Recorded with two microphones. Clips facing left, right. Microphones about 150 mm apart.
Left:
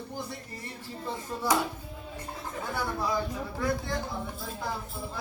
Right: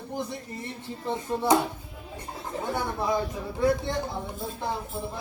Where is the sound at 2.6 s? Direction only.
25° right (ahead or behind).